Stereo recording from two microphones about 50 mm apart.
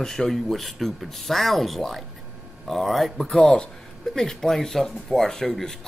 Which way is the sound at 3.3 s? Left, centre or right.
Centre.